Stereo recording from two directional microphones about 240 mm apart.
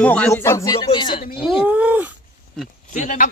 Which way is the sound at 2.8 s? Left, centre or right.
Left.